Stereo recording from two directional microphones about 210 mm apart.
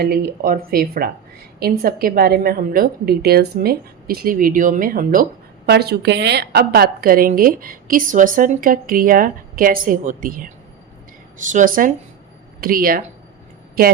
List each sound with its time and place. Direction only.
0.0 s a woman's voice: 45° right (ahead or behind)